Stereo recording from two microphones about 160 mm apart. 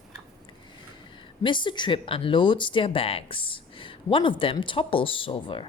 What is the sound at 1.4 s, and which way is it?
Speech, 30° left (ahead or behind).